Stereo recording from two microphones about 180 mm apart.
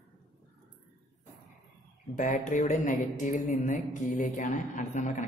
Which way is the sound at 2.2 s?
45° left (ahead or behind).